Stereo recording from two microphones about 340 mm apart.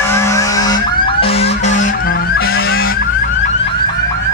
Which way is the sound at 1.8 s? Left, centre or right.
Left.